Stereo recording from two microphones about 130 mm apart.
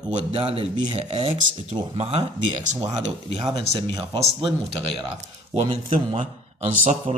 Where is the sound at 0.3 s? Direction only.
45° right (ahead or behind).